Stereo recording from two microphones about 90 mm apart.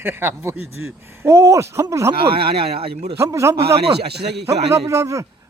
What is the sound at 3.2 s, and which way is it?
Speech, 35° right (ahead or behind).